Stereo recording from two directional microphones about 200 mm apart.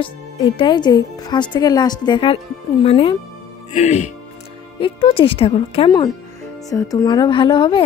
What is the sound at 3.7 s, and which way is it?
Speech, 35° left (ahead or behind).